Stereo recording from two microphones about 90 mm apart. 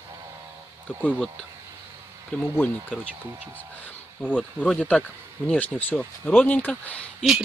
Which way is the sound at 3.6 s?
15° left (ahead or behind).